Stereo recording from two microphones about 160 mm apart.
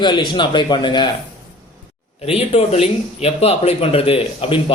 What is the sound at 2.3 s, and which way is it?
Speech, 40° left (ahead or behind).